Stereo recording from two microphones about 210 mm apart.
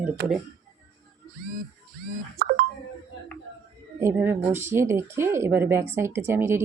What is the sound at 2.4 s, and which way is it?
Speech, 45° right (ahead or behind).